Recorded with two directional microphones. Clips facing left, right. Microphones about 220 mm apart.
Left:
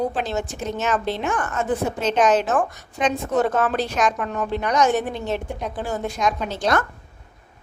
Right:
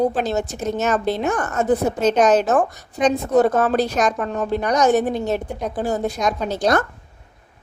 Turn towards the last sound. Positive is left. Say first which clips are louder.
# right 3 dB
turn(degrees=-40)  # may be behind; listen again after turning